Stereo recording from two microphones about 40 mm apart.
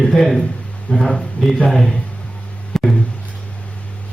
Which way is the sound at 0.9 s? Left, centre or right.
Left.